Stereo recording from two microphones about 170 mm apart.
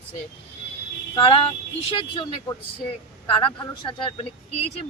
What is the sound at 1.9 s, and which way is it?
A woman's voice, 30° left (ahead or behind).